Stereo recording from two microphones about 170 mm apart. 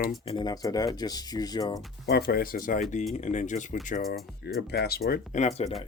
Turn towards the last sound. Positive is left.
turn(degrees=40)  # may be behind; listen again after turning